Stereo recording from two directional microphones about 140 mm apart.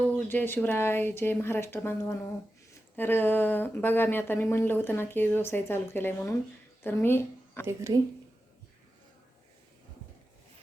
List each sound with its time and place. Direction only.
0.0 s speech: 10° left (ahead or behind)
7.7 s speech: 20° right (ahead or behind)